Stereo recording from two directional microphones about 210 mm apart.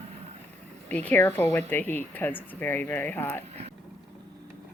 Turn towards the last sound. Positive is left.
turn(degrees=10)  # may be behind; listen again after turning